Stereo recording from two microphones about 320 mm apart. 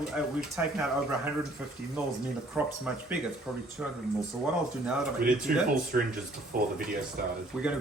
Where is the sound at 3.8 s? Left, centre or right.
Centre.